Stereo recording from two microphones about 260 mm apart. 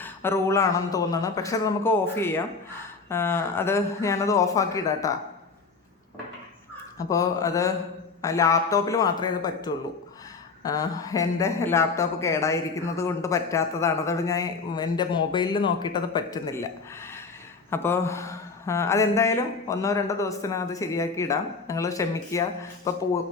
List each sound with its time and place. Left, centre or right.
0.0 s speech: centre
7.0 s speech: centre
17.7 s speech: centre